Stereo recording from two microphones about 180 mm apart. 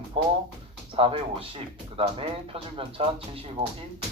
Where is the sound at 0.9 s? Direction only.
30° right (ahead or behind).